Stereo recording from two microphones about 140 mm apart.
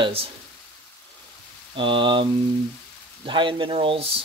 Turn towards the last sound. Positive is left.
turn(degrees=-45)  # may be behind; listen again after turning